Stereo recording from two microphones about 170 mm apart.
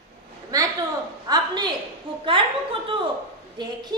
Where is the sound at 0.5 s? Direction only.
20° right (ahead or behind).